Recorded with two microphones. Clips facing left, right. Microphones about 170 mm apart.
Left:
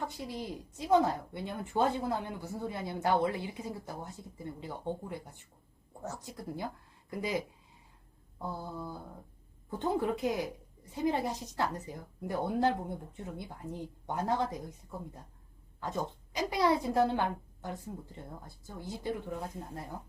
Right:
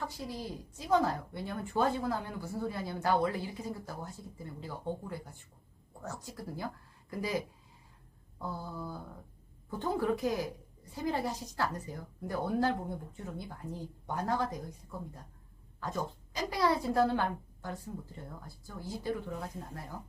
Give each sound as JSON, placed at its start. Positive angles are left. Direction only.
{"t": 0.0, "sound": "speech", "side_deg": 20}
{"t": 8.4, "sound": "mantra", "side_deg": 15}
{"t": 9.6, "sound": "speech", "side_deg": 20}